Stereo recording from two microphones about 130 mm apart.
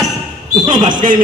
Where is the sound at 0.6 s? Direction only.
75° right (ahead or behind).